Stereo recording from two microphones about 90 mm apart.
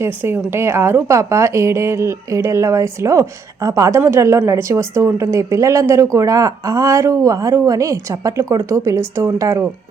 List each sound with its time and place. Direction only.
0.0 s speech: 25° right (ahead or behind)